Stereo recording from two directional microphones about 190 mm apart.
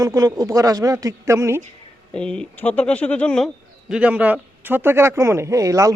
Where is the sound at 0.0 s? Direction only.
20° right (ahead or behind).